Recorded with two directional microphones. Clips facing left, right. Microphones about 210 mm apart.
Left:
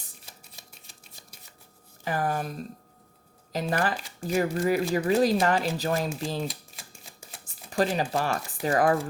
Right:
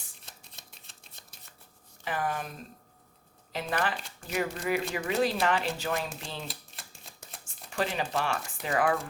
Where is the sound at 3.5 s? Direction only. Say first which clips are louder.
Left 4 dB; 40° left (ahead or behind).